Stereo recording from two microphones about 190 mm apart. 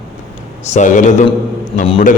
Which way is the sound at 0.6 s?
40° left (ahead or behind).